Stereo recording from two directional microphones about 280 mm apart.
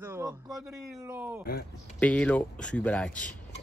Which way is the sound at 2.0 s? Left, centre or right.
Centre.